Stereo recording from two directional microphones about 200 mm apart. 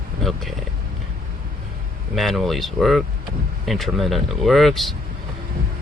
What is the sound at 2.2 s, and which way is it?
Speech, centre (ahead or behind).